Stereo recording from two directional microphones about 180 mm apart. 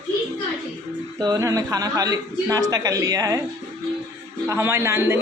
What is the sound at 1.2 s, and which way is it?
A man's voice, 20° right (ahead or behind).